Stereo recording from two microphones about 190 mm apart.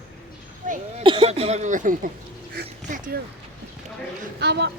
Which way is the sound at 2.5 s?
50° right (ahead or behind).